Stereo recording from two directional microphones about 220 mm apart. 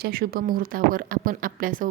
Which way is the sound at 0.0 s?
40° right (ahead or behind).